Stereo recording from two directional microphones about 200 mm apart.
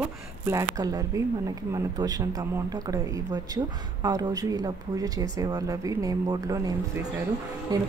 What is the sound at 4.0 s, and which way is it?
Speech, 15° right (ahead or behind).